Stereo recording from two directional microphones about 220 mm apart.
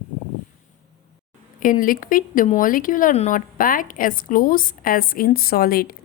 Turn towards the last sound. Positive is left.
turn(degrees=45)  # may be behind; listen again after turning